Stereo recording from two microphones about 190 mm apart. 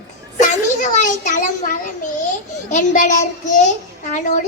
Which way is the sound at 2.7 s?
40° left (ahead or behind).